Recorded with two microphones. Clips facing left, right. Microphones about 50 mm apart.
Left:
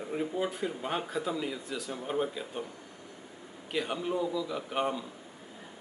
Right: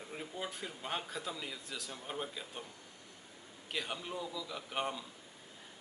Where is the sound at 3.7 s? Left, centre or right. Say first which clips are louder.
Left 8 dB; centre.